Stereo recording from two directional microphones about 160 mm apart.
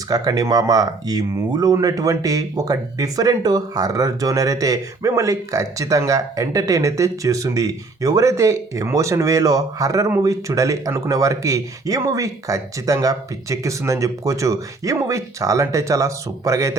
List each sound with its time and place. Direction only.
0.1 s speech: 25° right (ahead or behind)